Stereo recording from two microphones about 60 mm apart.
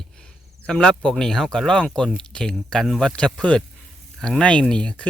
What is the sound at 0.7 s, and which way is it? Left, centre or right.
Speech, centre.